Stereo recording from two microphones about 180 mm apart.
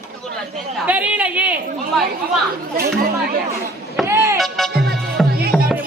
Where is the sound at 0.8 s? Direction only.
10° right (ahead or behind).